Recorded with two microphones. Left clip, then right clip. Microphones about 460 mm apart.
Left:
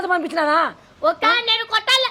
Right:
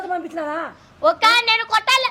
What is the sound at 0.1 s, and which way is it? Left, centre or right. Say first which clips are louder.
Speech: left 8 dB; left.